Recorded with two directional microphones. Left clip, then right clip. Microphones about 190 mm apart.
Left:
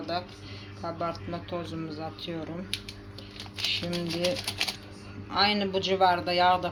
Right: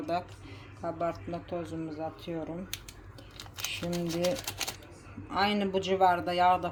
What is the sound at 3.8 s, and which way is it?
Speech, 15° right (ahead or behind).